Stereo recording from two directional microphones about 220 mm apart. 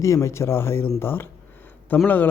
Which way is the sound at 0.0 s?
15° left (ahead or behind).